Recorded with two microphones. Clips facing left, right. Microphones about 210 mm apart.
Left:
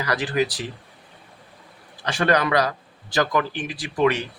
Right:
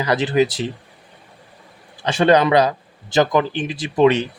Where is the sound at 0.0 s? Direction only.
25° right (ahead or behind).